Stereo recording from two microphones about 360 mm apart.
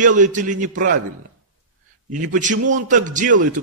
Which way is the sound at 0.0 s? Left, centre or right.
Right.